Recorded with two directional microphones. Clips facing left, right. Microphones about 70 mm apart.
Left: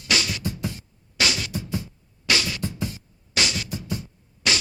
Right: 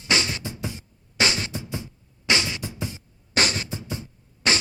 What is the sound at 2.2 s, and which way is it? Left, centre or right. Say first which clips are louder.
Music: even; right.